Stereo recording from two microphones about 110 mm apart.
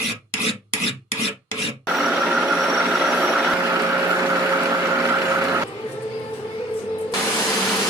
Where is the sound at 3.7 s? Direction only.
25° right (ahead or behind).